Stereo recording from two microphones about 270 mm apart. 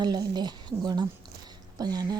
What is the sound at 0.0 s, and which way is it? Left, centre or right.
A woman's voice, centre.